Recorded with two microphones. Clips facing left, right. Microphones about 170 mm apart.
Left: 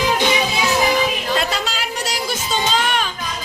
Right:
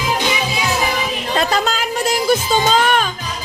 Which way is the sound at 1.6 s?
55° right (ahead or behind).